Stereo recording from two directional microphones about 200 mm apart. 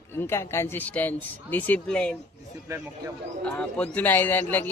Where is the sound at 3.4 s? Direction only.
5° left (ahead or behind).